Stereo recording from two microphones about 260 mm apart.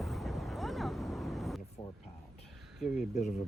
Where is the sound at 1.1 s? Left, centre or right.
Centre.